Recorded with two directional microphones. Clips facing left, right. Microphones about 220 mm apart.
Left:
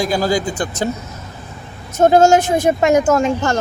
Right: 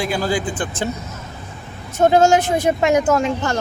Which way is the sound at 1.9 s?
45° left (ahead or behind).